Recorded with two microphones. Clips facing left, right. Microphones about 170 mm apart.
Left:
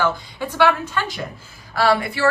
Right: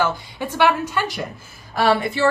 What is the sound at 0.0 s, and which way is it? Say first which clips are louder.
A woman's voice: even; 15° right (ahead or behind).